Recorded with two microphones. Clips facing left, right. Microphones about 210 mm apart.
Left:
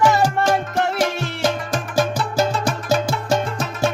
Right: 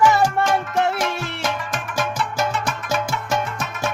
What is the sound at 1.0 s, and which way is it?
Music, 35° left (ahead or behind).